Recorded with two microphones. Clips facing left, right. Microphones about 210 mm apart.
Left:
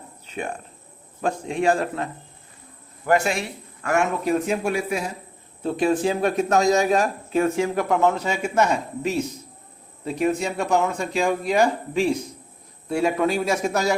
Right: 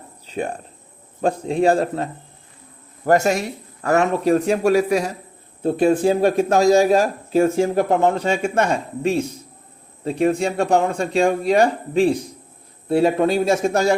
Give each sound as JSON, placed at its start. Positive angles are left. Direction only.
{"t": 0.3, "sound": "a man's voice", "side_deg": -35}